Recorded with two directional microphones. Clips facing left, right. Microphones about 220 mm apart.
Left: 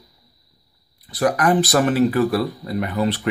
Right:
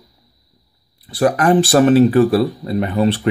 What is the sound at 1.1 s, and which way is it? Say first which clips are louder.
Speech: right 4 dB; 30° right (ahead or behind).